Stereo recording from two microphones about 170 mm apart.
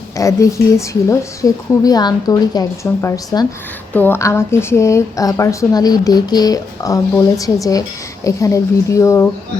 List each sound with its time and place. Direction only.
0.2 s a woman's voice: 20° left (ahead or behind)